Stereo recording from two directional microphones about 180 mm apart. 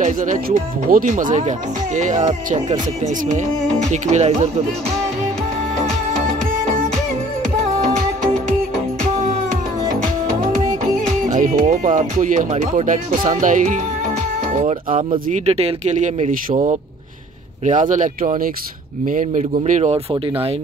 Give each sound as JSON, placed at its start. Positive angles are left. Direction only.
{"t": 0.0, "sound": "speech", "side_deg": -45}
{"t": 3.9, "sound": "speech", "side_deg": -40}
{"t": 11.3, "sound": "speech", "side_deg": -45}
{"t": 15.2, "sound": "speech", "side_deg": -40}